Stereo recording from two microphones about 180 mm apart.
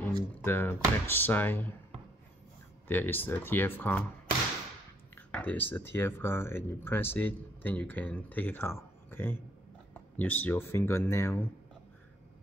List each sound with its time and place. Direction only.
0.0 s speech: 10° left (ahead or behind)
2.9 s speech: 10° left (ahead or behind)
5.1 s speech: 10° left (ahead or behind)